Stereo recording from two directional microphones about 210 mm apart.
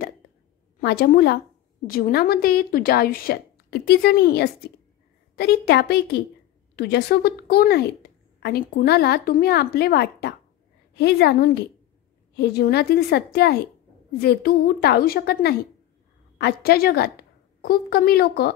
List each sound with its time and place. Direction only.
0.7 s a woman's voice: 50° left (ahead or behind)